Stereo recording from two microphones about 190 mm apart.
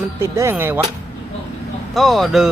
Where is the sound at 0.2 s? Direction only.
15° right (ahead or behind).